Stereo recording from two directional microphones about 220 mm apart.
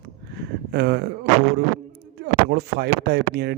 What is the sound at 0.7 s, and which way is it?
Speech, 50° right (ahead or behind).